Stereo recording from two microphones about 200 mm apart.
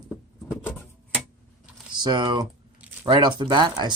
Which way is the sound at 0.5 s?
15° left (ahead or behind).